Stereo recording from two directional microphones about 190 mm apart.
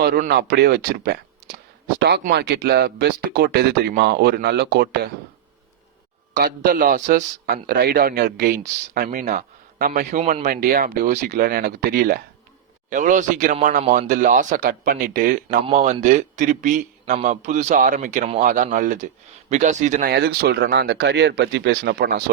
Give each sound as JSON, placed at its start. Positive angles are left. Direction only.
{"t": 0.0, "sound": "speech", "side_deg": -50}
{"t": 6.3, "sound": "a man's voice", "side_deg": -50}
{"t": 12.9, "sound": "a man's voice", "side_deg": -45}